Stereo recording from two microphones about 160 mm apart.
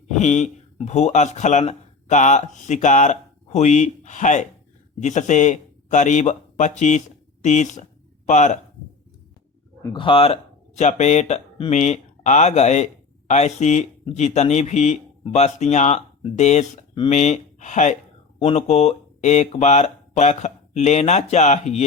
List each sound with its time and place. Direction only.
0.1 s speech: 50° left (ahead or behind)
9.9 s speech: 35° left (ahead or behind)